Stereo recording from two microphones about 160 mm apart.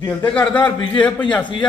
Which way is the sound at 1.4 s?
30° left (ahead or behind).